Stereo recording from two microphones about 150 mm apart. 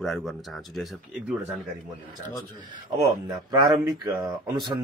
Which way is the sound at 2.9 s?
25° right (ahead or behind).